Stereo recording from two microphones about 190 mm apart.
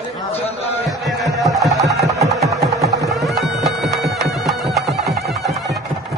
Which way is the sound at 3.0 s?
Centre (ahead or behind).